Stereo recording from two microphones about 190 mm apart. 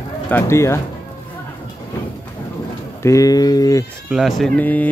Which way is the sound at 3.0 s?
15° left (ahead or behind).